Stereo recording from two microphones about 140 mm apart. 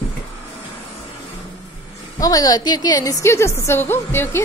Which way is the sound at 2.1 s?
25° left (ahead or behind).